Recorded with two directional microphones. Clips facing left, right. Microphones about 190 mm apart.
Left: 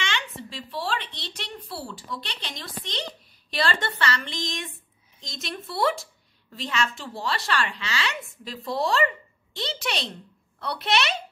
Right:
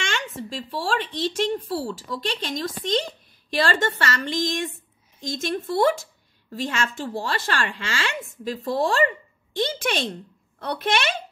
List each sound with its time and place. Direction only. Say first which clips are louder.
0.0 s speech: right 3 dB; 45° right (ahead or behind)